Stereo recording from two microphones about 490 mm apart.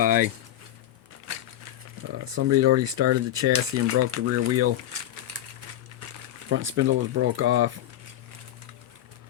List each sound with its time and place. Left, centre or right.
0.0 s speech: centre
2.2 s speech: right
6.5 s speech: right